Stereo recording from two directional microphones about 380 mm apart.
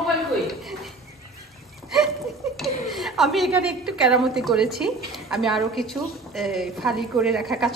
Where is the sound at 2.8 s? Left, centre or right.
Centre.